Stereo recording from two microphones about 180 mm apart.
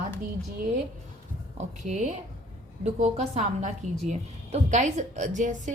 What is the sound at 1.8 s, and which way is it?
A woman's voice, 40° right (ahead or behind).